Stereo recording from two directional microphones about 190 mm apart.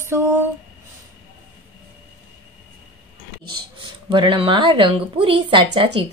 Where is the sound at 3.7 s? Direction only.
25° right (ahead or behind).